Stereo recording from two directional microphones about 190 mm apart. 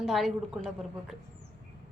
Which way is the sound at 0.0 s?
Centre (ahead or behind).